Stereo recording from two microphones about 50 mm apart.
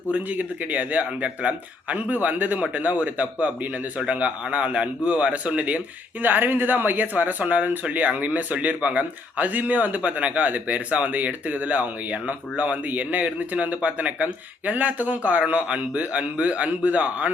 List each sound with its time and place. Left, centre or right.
0.1 s speech: right
6.2 s speech: right